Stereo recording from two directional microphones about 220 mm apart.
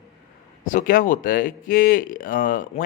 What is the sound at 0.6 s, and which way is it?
Speech, 40° left (ahead or behind).